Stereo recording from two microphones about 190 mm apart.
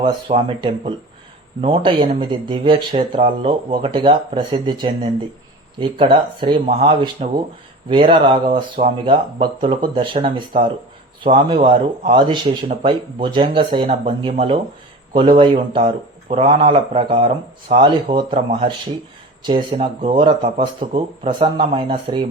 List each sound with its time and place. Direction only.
0.0 s speech: 30° right (ahead or behind)
19.4 s speech: 25° right (ahead or behind)